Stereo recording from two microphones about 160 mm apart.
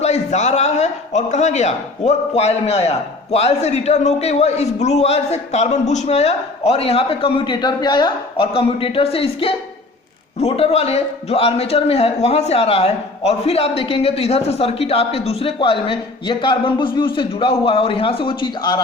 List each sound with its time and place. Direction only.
0.0 s a man's voice: 45° left (ahead or behind); by 18.8 s 30° left (ahead or behind)